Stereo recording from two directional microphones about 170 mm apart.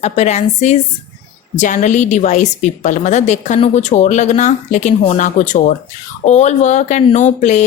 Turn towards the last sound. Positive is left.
turn(degrees=45)  # may be behind; listen again after turning